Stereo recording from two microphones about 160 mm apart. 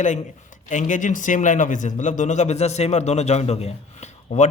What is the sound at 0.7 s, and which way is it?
Speech, 50° left (ahead or behind).